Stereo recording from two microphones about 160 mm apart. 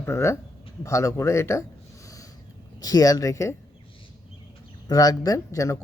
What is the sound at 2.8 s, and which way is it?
Speech, 20° left (ahead or behind).